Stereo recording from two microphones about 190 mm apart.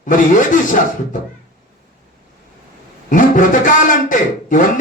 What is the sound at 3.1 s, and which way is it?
A man's voice, 45° left (ahead or behind).